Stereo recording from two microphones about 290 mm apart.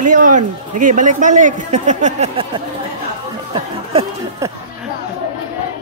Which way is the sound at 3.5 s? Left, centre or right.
Centre.